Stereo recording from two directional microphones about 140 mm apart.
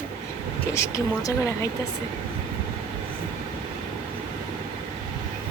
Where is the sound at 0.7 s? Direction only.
20° left (ahead or behind).